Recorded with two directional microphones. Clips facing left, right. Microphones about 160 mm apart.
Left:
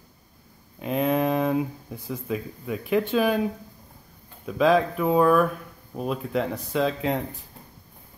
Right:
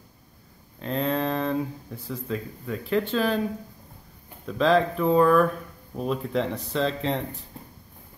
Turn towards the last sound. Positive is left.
turn(degrees=5)  # may be behind; listen again after turning